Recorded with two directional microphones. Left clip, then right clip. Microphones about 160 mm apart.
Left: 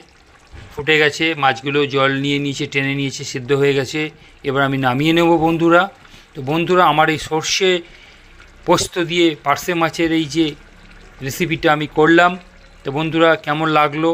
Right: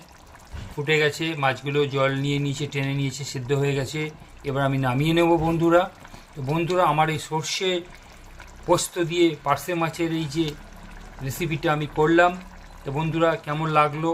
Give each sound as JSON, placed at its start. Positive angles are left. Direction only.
{"t": 0.9, "sound": "speech", "side_deg": 40}